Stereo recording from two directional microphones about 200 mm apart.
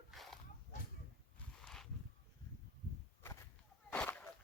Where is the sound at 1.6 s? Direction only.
Centre (ahead or behind).